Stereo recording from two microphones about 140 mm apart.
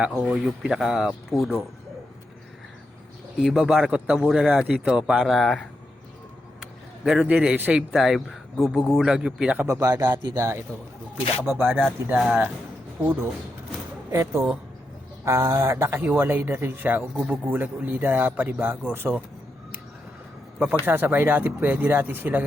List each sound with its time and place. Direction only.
0.3 s speech: 5° right (ahead or behind)
3.3 s speech: centre (ahead or behind)
9.6 s speech: 25° right (ahead or behind)
20.8 s speech: 15° right (ahead or behind)